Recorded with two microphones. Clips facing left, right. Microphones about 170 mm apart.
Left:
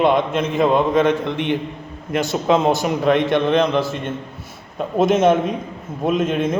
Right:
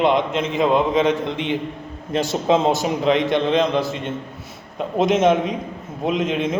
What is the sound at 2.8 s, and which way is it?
Speech, 55° left (ahead or behind).